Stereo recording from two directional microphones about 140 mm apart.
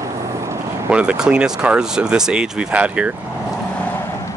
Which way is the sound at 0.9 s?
10° right (ahead or behind).